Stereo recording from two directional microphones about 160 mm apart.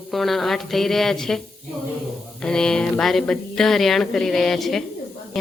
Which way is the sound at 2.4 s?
5° left (ahead or behind).